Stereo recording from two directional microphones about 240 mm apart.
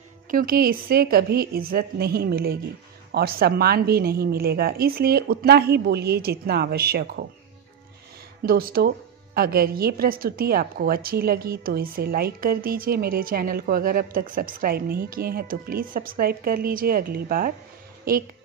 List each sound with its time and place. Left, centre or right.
0.3 s a woman's voice: right
8.5 s a woman's voice: right